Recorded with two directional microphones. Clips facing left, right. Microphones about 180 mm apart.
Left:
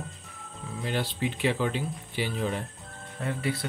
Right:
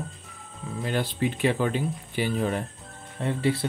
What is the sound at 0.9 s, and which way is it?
Speech, 50° right (ahead or behind).